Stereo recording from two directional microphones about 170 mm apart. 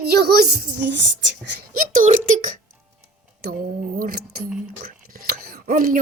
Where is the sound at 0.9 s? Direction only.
90° right.